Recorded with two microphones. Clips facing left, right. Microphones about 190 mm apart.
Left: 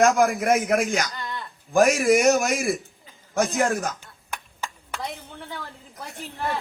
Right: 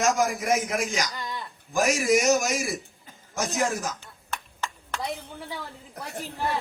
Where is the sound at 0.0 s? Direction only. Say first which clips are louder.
Left 5 dB; 55° left (ahead or behind).